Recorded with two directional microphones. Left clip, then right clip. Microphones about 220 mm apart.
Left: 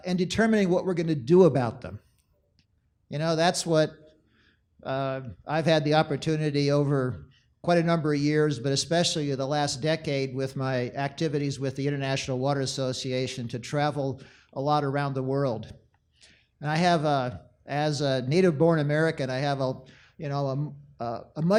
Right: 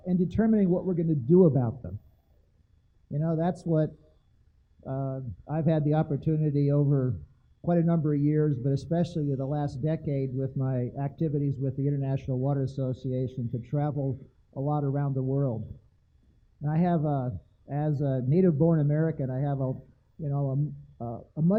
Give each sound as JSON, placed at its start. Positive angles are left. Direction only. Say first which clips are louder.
{"t": 0.0, "sound": "speech", "louder": "left 3 dB", "side_deg": 5}
{"t": 3.1, "sound": "speech", "louder": "left 6 dB", "side_deg": 5}
{"t": 6.8, "sound": "speech", "louder": "left 2 dB", "side_deg": 20}
{"t": 7.7, "sound": "speech", "louder": "left 4 dB", "side_deg": 5}
{"t": 13.9, "sound": "speech", "louder": "left 3 dB", "side_deg": 25}
{"t": 14.9, "sound": "speech", "louder": "left 5 dB", "side_deg": 10}
{"t": 15.2, "sound": "speech", "louder": "left 1 dB", "side_deg": 20}
{"t": 16.6, "sound": "speech", "louder": "left 6 dB", "side_deg": 5}
{"t": 18.5, "sound": "speech", "louder": "left 4 dB", "side_deg": 25}
{"t": 18.8, "sound": "speech", "louder": "left 4 dB", "side_deg": 10}
{"t": 19.5, "sound": "speech", "louder": "left 5 dB", "side_deg": 25}